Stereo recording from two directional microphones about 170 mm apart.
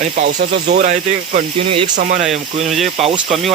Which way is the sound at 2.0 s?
50° right (ahead or behind).